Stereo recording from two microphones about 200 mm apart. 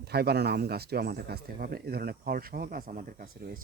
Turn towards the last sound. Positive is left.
turn(degrees=-45)  # may be behind; listen again after turning